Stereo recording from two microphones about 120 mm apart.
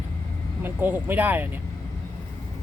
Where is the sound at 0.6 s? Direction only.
15° right (ahead or behind).